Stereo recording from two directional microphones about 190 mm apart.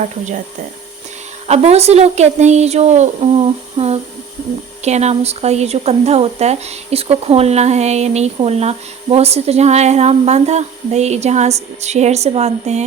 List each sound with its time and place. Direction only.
0.0 s speech: 40° right (ahead or behind)
1.5 s speech: 35° right (ahead or behind)